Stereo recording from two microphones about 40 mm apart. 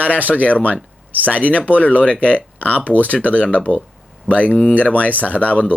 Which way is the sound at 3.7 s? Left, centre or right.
Right.